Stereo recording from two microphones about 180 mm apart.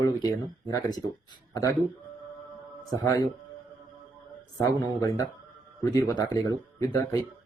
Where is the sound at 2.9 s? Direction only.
20° left (ahead or behind).